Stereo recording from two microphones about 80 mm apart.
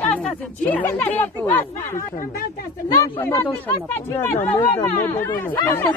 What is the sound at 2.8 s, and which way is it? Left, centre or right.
Speech, left.